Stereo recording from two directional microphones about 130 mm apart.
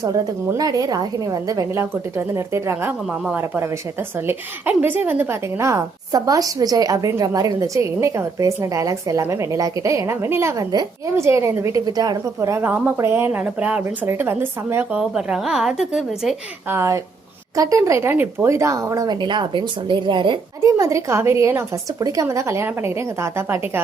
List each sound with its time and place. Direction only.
0.0 s a woman's voice: 30° right (ahead or behind)
14.9 s speech: 5° right (ahead or behind)
16.6 s a woman's voice: 20° right (ahead or behind); by 20.4 s 40° right (ahead or behind)
20.6 s a woman's voice: 25° right (ahead or behind)